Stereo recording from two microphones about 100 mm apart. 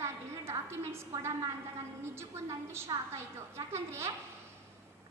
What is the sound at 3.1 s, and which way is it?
A woman's voice, 25° right (ahead or behind).